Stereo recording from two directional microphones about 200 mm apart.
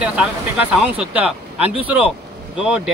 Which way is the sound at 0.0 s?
5° right (ahead or behind).